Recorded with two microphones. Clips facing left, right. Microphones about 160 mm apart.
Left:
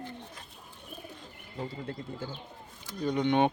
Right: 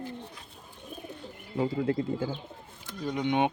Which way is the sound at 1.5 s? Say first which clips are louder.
Right 10 dB; 90° right.